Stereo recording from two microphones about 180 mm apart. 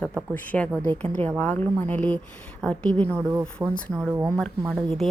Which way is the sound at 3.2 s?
10° right (ahead or behind).